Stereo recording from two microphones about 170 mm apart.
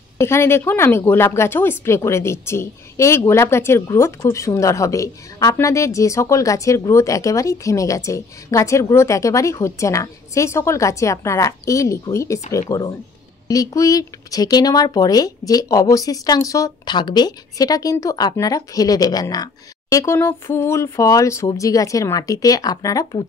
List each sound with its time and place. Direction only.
0.2 s speech: 15° left (ahead or behind)